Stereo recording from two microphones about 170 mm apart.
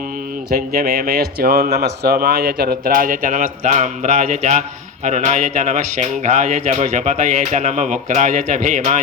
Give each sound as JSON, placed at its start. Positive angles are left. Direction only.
{"t": 0.5, "sound": "speech", "side_deg": -60}